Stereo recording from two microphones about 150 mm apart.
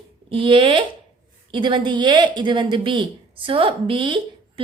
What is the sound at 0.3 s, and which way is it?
A woman's voice, 35° right (ahead or behind).